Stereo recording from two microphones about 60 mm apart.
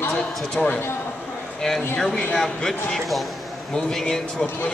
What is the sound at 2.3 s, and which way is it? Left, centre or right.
A man's voice, centre.